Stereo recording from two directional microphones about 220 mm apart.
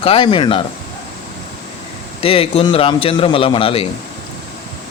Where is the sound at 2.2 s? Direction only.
25° left (ahead or behind).